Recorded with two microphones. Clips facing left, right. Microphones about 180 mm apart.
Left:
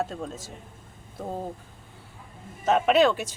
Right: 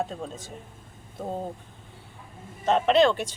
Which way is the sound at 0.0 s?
Centre (ahead or behind).